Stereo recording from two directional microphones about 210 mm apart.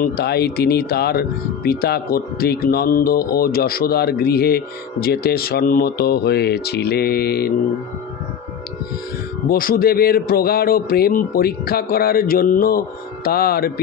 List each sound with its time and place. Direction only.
0.0 s speech: 50° left (ahead or behind)
9.5 s speech: 45° left (ahead or behind)